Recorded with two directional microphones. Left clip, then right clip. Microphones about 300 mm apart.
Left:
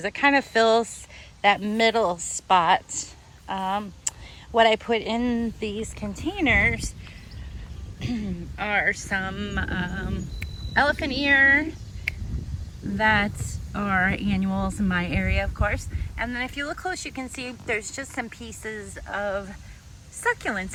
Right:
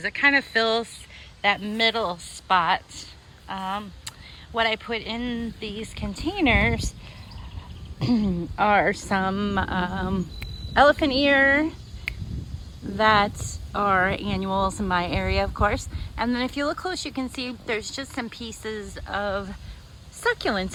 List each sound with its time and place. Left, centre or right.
0.0 s speech: centre
7.9 s speech: centre
13.0 s speech: centre